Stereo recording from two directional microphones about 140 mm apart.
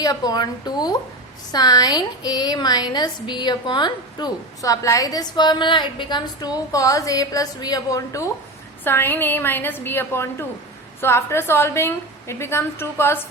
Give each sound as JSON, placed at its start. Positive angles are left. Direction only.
{"t": 0.0, "sound": "a woman's voice", "side_deg": 30}